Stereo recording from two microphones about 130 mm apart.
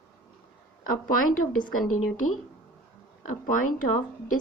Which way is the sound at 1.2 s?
90° left.